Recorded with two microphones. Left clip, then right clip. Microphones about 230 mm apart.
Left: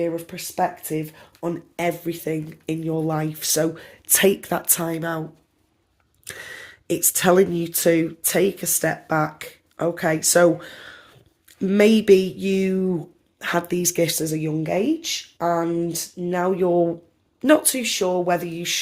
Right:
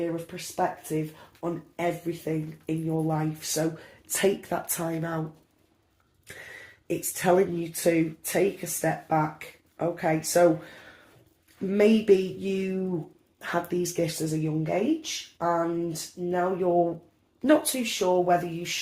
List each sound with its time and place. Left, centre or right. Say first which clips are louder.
0.9 s speech: left 3 dB; left
6.2 s speech: left 7 dB; left
11.7 s speech: left 6 dB; left